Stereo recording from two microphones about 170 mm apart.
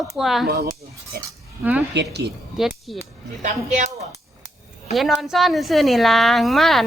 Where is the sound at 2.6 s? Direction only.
Centre (ahead or behind).